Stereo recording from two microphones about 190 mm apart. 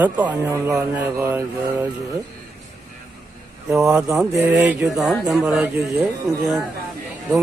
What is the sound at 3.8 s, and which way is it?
Speech, 15° right (ahead or behind).